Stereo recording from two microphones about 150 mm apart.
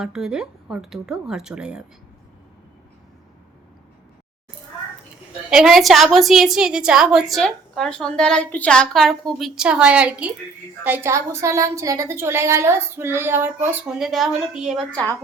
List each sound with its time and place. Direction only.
0.0 s a woman's voice: 5° right (ahead or behind)
5.5 s a woman's voice: 5° right (ahead or behind)
13.9 s a woman's voice: centre (ahead or behind)